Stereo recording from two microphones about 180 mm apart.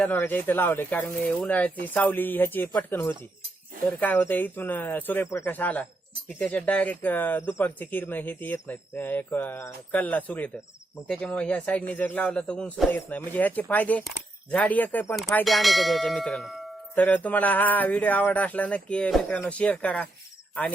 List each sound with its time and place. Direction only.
0.0 s speech: 10° left (ahead or behind)
14.5 s a sound: 10° left (ahead or behind)
17.0 s speech: 10° left (ahead or behind)